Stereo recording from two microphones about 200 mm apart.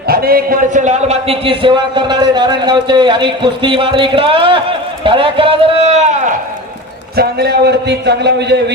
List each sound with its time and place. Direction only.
0.1 s a man's voice: 50° right (ahead or behind)
7.2 s a man's voice: 55° right (ahead or behind)